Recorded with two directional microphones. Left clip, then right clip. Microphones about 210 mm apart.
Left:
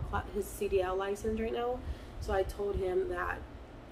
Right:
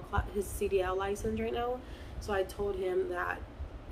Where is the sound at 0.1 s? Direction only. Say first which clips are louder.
Right 1 dB; 5° right (ahead or behind).